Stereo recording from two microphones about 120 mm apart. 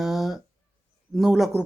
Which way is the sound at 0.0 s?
5° right (ahead or behind).